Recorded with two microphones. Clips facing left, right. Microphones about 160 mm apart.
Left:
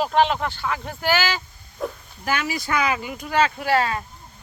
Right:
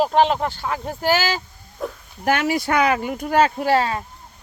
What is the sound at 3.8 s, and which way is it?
Speech, 25° right (ahead or behind).